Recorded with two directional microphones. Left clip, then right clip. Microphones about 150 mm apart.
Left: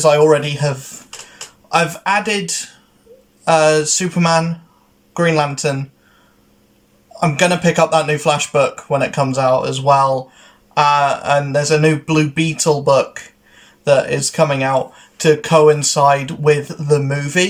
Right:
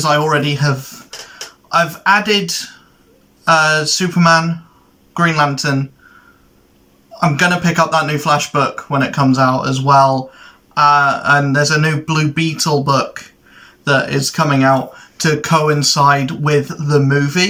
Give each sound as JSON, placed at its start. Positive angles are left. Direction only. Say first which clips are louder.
{"t": 0.0, "sound": "speech", "louder": "left 3 dB", "side_deg": 25}
{"t": 7.2, "sound": "speech", "louder": "right 1 dB", "side_deg": 25}